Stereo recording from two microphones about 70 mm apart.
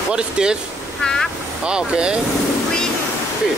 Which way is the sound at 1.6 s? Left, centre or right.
Centre.